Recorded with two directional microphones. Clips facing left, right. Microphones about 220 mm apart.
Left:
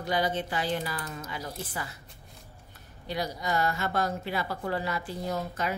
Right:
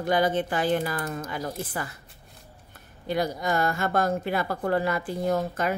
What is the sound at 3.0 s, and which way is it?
A woman's voice, 50° right (ahead or behind).